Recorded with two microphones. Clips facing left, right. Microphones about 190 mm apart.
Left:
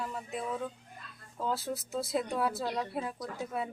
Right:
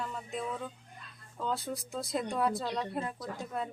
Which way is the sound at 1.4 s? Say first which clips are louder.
Left 1 dB; centre (ahead or behind).